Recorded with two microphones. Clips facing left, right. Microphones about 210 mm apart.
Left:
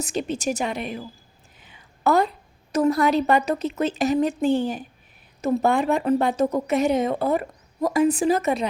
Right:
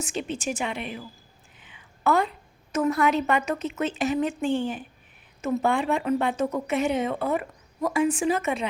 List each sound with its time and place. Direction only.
0.0 s speech: 40° left (ahead or behind)
1.5 s a sound: 40° left (ahead or behind)
2.7 s speech: 35° left (ahead or behind)